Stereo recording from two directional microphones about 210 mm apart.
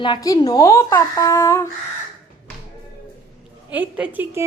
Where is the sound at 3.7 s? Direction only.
5° right (ahead or behind).